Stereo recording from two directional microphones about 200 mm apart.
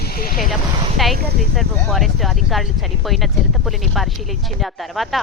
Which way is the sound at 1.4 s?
Centre (ahead or behind).